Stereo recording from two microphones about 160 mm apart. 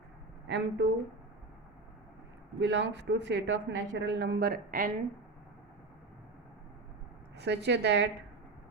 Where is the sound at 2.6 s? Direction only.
90° right; by 4.9 s 65° right (ahead or behind).